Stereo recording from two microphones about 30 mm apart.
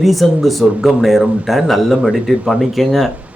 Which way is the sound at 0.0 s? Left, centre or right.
Centre.